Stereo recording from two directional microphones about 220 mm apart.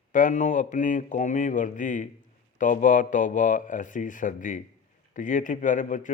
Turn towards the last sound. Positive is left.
turn(degrees=35)  # may be behind; listen again after turning